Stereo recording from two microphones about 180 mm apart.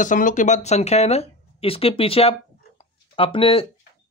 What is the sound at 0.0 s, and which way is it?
Speech, 45° left (ahead or behind).